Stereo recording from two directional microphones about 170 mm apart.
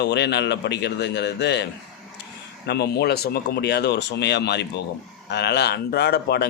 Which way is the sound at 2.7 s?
75° left (ahead or behind).